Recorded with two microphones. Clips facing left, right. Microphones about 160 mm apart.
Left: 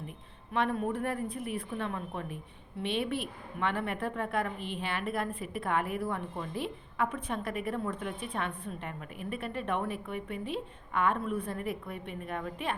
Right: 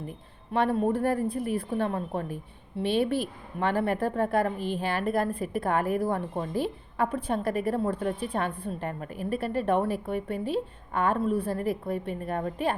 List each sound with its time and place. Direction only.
0.5 s speech: 35° right (ahead or behind)